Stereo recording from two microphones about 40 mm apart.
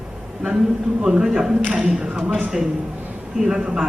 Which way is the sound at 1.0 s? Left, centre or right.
Centre.